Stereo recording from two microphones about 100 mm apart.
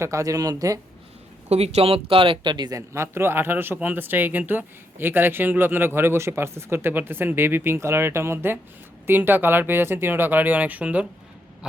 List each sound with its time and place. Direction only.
0.0 s speech: 30° right (ahead or behind)
1.5 s speech: 90° right; by 2.7 s 50° right (ahead or behind)
2.7 s speech: 25° right (ahead or behind)